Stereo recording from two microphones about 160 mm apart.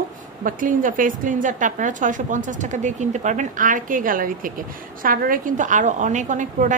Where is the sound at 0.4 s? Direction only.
55° right (ahead or behind).